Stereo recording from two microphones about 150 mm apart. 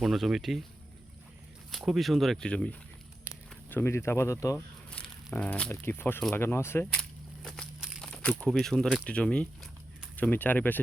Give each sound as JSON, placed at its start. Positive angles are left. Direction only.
{"t": 0.0, "sound": "speech", "side_deg": 0}
{"t": 1.7, "sound": "speech", "side_deg": 0}
{"t": 4.5, "sound": "speech", "side_deg": 10}
{"t": 7.4, "sound": "crumpling", "side_deg": 5}
{"t": 8.4, "sound": "speech", "side_deg": 0}